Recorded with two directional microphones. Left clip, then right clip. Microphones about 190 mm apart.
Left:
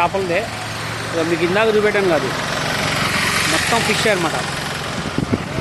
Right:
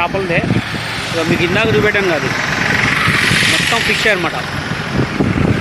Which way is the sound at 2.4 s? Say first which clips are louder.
Right 5 dB; 40° left (ahead or behind).